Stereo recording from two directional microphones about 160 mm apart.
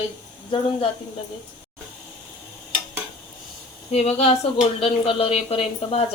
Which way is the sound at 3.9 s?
40° left (ahead or behind).